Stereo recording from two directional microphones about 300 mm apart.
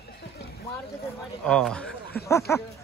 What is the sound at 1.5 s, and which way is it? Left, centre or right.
A man's voice, centre.